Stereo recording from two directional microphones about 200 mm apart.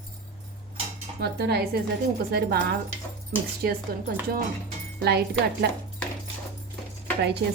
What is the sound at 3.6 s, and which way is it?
Speech, 50° right (ahead or behind).